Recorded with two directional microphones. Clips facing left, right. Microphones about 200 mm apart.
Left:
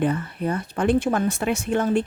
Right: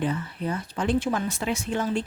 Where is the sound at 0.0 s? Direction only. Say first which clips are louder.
Left 5 dB; 60° left (ahead or behind).